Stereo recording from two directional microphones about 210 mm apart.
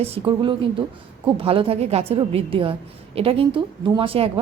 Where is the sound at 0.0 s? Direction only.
25° right (ahead or behind).